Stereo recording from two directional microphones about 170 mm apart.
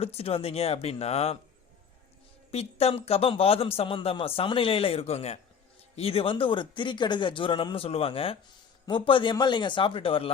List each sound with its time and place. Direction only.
0.0 s a man's voice: 35° left (ahead or behind)
2.5 s a man's voice: 35° left (ahead or behind)